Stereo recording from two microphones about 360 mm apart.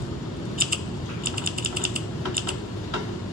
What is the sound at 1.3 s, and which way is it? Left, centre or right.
Ratchet, right.